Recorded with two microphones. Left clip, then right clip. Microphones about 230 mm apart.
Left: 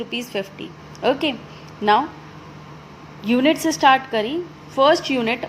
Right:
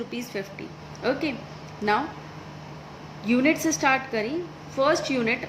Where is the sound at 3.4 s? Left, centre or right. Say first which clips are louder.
Left 8 dB; left.